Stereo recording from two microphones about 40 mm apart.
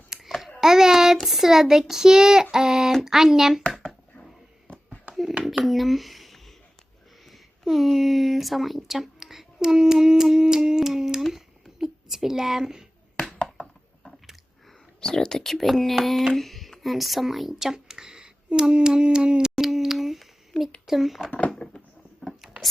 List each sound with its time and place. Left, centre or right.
0.3 s babbling: centre
0.6 s child singing: centre
5.6 s speech: centre
11.2 s child singing: centre
11.8 s a woman's voice: centre
15.0 s speech: centre
15.8 s hands: centre
16.8 s a woman's voice: centre; by 19.5 s right
19.5 s humming: centre
20.8 s speech: centre
21.6 s a sound: left
22.2 s a sound: centre